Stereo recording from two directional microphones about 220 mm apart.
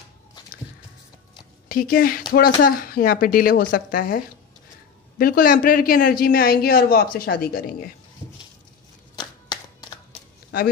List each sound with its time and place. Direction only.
1.7 s speech: 40° left (ahead or behind)
5.2 s a man's voice: 40° left (ahead or behind)
9.1 s a sound: 20° left (ahead or behind)